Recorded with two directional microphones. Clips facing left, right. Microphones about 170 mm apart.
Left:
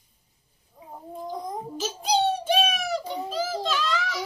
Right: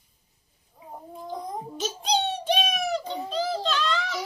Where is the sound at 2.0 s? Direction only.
5° left (ahead or behind).